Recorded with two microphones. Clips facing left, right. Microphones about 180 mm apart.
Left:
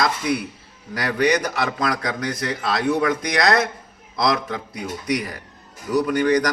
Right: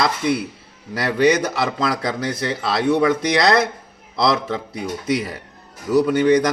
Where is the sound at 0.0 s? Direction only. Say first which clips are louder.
Right 2 dB; 25° right (ahead or behind).